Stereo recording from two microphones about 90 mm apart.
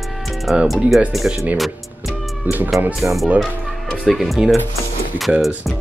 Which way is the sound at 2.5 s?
20° right (ahead or behind).